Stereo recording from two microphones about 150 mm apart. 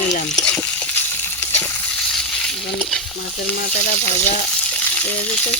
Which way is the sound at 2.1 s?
5° left (ahead or behind).